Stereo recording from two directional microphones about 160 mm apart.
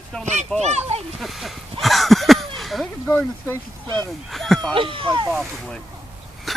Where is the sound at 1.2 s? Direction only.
Centre (ahead or behind).